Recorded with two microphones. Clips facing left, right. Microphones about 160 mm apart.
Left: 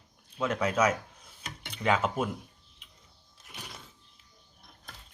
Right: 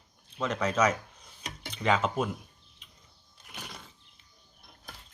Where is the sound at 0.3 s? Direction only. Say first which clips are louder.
Even; 5° left (ahead or behind).